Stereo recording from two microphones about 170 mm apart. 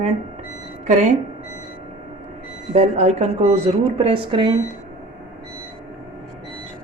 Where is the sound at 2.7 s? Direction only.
40° right (ahead or behind).